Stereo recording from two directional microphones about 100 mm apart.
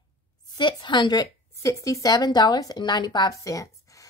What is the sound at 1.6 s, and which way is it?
Speech, 30° left (ahead or behind).